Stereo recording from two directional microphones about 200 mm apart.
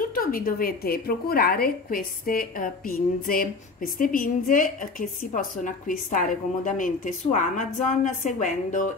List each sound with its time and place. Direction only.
0.1 s a woman's voice: 45° left (ahead or behind)